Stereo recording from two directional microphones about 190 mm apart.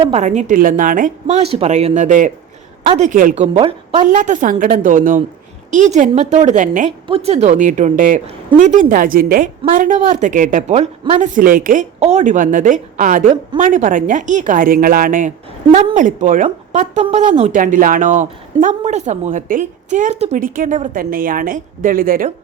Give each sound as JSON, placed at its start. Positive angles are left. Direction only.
{"t": 0.0, "sound": "a woman's voice", "side_deg": -35}
{"t": 2.8, "sound": "a woman's voice", "side_deg": -30}
{"t": 3.1, "sound": "a woman's voice", "side_deg": -45}
{"t": 4.0, "sound": "a woman's voice", "side_deg": -40}
{"t": 11.3, "sound": "speech", "side_deg": -45}
{"t": 15.7, "sound": "speech", "side_deg": -35}